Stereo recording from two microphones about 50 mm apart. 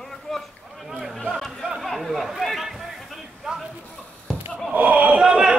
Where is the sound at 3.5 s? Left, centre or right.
Centre.